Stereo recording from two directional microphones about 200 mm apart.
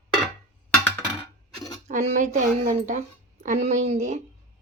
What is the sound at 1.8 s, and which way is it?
A woman's voice, 35° right (ahead or behind).